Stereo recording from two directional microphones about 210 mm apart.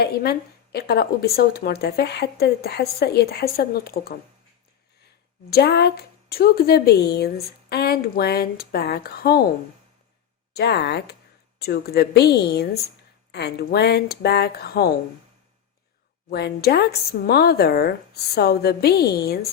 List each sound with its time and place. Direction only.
0.0 s speech: 50° left (ahead or behind)
5.5 s speech: 50° left (ahead or behind)
10.5 s speech: 50° left (ahead or behind)
16.3 s speech: 50° left (ahead or behind)